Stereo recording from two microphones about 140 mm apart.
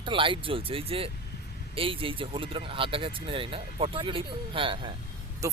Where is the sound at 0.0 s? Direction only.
35° right (ahead or behind).